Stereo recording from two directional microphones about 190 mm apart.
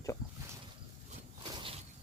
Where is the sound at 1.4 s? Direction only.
30° right (ahead or behind).